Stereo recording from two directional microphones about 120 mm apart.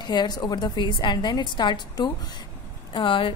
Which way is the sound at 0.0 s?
35° left (ahead or behind).